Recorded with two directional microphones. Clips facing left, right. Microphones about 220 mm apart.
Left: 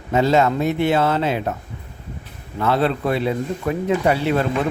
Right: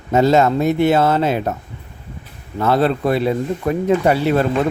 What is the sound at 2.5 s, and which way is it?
Speech, 40° right (ahead or behind).